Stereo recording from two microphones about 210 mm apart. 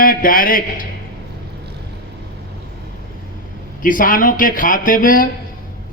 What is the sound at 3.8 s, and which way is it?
A man's voice, 40° left (ahead or behind).